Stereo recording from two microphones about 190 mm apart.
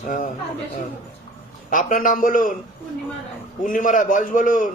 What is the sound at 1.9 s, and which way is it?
Speech, 45° left (ahead or behind).